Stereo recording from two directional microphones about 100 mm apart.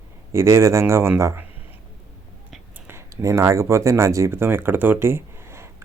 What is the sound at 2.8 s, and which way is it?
Speech, 30° right (ahead or behind).